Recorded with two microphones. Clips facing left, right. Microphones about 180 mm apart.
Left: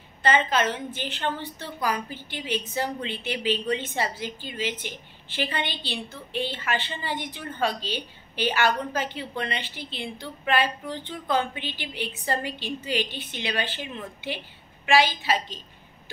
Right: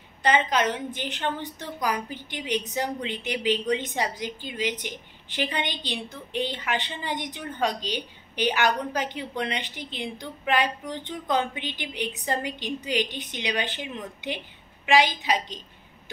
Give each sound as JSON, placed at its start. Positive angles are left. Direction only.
{"t": 0.2, "sound": "a woman's voice", "side_deg": -15}